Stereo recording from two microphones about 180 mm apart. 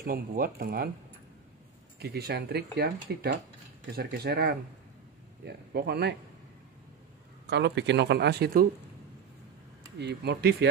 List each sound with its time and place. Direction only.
0.0 s speech: 55° right (ahead or behind)
2.0 s speech: 60° right (ahead or behind)
7.4 s speech: 75° right (ahead or behind)
9.9 s speech: 65° right (ahead or behind)